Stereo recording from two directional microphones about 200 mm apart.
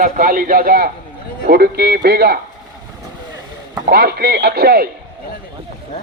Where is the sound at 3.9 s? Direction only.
50° right (ahead or behind).